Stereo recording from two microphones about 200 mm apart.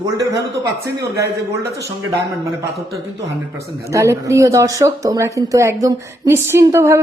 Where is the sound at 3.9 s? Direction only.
15° right (ahead or behind).